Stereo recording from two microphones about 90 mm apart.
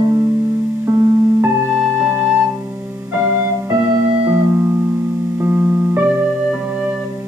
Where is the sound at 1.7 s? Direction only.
10° right (ahead or behind).